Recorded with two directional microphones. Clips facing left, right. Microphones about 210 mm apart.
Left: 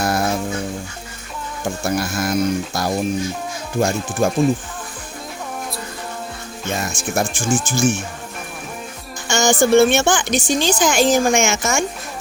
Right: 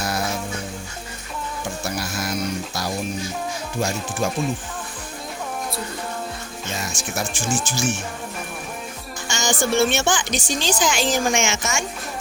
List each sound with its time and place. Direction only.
0.0 s music: 50° left (ahead or behind)
1.8 s a woman's voice: 50° left (ahead or behind)
6.7 s a woman's voice: 55° left (ahead or behind)
9.3 s a woman's voice: 50° left (ahead or behind)